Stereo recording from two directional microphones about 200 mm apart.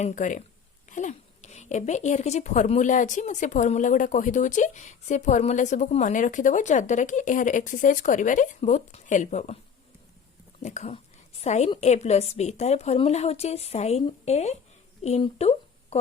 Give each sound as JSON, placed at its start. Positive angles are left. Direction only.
{"t": 0.0, "sound": "speech", "side_deg": 40}
{"t": 10.6, "sound": "speech", "side_deg": 35}